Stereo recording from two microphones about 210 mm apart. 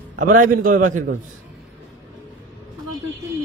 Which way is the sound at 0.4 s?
40° right (ahead or behind).